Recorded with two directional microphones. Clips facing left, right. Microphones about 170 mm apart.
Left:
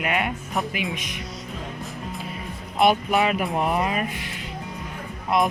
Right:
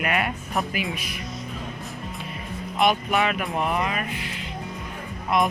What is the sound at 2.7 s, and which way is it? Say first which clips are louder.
Speech: left 2 dB; 35° left (ahead or behind).